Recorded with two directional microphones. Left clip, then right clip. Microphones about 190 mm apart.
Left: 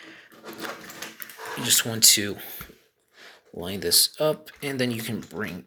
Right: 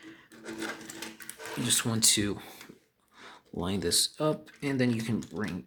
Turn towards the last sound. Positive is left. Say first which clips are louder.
# left 3 dB
turn(degrees=-20)  # may be behind; listen again after turning